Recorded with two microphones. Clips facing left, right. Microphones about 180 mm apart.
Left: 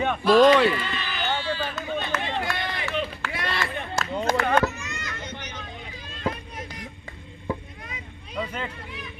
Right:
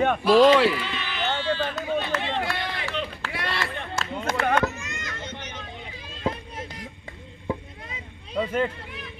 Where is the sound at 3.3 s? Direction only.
Centre (ahead or behind).